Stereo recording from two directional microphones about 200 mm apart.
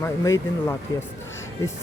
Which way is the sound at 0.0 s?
15° left (ahead or behind).